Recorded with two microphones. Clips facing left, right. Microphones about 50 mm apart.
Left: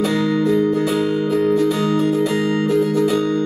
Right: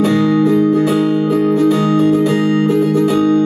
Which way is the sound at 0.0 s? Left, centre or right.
Right.